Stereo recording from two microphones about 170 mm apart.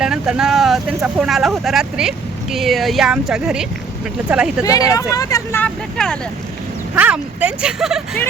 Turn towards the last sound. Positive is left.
turn(degrees=-5)  # may be behind; listen again after turning